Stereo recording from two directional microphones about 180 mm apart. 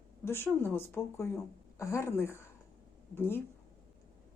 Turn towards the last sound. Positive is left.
turn(degrees=15)  # may be behind; listen again after turning